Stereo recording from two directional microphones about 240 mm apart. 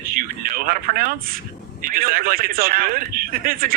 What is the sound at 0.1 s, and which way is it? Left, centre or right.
A man's voice, right.